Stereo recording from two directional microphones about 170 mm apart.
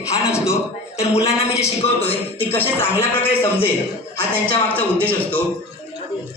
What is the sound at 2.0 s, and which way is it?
A man's voice, 10° left (ahead or behind).